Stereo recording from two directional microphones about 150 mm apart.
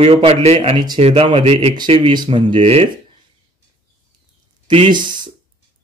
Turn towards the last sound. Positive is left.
turn(degrees=-30)  # may be behind; listen again after turning